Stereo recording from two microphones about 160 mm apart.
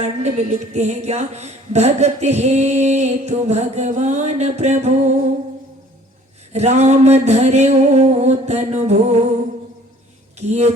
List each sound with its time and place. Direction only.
0.0 s speech: 45° right (ahead or behind)
6.5 s speech: 45° right (ahead or behind)
10.3 s speech: 45° right (ahead or behind)